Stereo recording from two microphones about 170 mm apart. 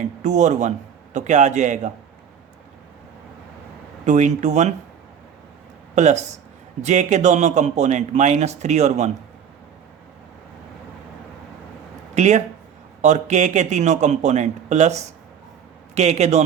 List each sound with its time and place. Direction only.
0.2 s speech: 45° right (ahead or behind)
4.0 s speech: 45° right (ahead or behind)
5.9 s speech: 45° right (ahead or behind)
12.1 s a man's voice: 40° right (ahead or behind)